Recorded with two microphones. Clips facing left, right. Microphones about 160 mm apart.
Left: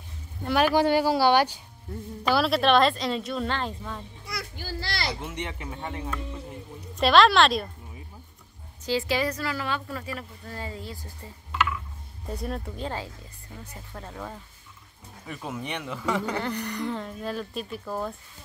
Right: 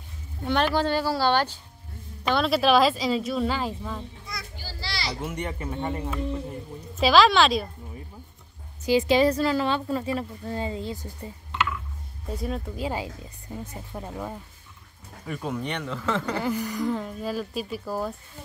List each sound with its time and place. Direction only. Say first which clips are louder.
0.5 s speech: left 2 dB; 10° left (ahead or behind)
4.3 s children playing: left 4 dB; 55° left (ahead or behind)
5.2 s speech: right 3 dB; 5° right (ahead or behind)
8.8 s a woman's voice: right 6 dB; 20° right (ahead or behind)
12.3 s speech: right 2 dB; centre (ahead or behind)
15.2 s speech: right 4 dB; centre (ahead or behind)
16.3 s speech: right 3 dB; 5° right (ahead or behind)